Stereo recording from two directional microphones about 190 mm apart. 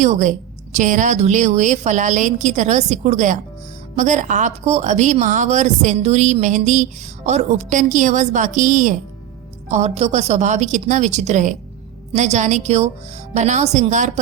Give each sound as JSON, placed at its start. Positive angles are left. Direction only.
{"t": 0.0, "sound": "a woman's voice", "side_deg": -40}